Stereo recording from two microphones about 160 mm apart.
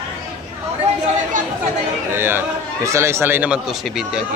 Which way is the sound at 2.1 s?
15° right (ahead or behind).